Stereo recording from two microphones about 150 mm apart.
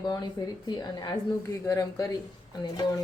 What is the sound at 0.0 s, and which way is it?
Speech, 25° left (ahead or behind).